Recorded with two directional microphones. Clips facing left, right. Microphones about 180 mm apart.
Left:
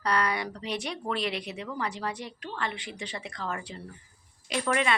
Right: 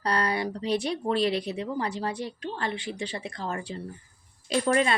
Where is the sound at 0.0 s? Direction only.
30° right (ahead or behind).